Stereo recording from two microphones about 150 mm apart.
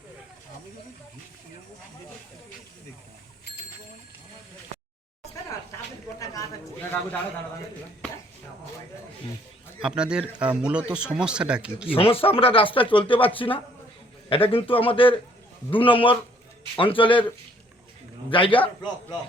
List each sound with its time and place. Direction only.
9.8 s a man's voice: 5° right (ahead or behind)
11.9 s a man's voice: 40° left (ahead or behind)
18.3 s a man's voice: 35° left (ahead or behind)